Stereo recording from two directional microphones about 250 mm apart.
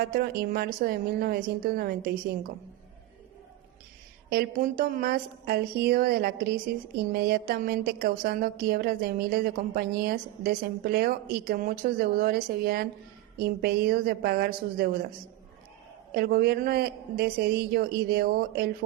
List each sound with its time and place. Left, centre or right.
0.0 s a woman's voice: right
4.3 s a woman's voice: right
16.1 s a woman's voice: right